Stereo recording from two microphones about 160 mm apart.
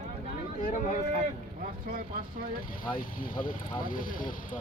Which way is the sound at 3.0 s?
60° left (ahead or behind).